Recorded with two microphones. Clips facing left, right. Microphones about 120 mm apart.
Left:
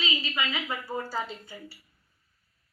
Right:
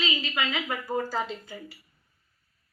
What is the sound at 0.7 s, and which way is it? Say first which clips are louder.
Speech: right 3 dB; 40° right (ahead or behind).